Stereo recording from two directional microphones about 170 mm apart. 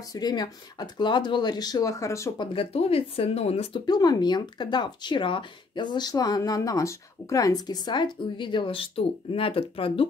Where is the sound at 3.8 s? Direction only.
25° left (ahead or behind).